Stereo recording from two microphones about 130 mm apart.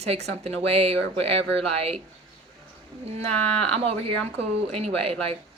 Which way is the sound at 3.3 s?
10° left (ahead or behind).